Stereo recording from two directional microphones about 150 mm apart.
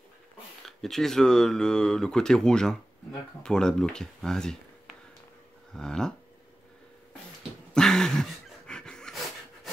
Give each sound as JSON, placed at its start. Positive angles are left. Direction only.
{"t": 0.7, "sound": "speech", "side_deg": 0}
{"t": 5.7, "sound": "speech", "side_deg": 5}
{"t": 7.7, "sound": "dog", "side_deg": 5}